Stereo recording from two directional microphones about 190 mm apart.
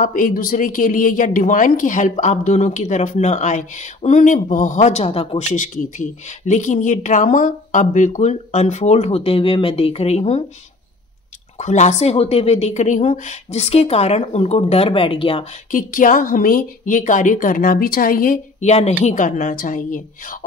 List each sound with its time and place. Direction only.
0.0 s a woman's voice: 45° left (ahead or behind)
11.5 s a woman's voice: 40° left (ahead or behind)
15.7 s a woman's voice: 45° left (ahead or behind)